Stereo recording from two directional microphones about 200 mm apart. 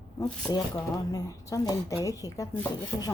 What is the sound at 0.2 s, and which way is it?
Speech, 20° left (ahead or behind).